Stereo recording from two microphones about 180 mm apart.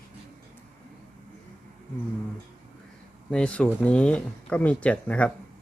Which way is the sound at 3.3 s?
5° left (ahead or behind).